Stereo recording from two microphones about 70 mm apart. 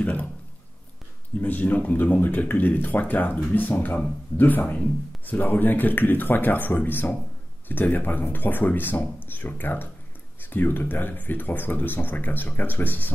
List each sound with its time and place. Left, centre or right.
0.0 s speech: left
1.4 s a man's voice: left